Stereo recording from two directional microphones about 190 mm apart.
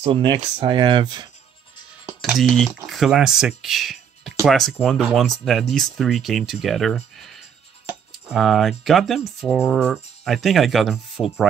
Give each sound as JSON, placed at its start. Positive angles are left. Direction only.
{"t": 0.0, "sound": "speech", "side_deg": -25}
{"t": 2.0, "sound": "speech", "side_deg": -5}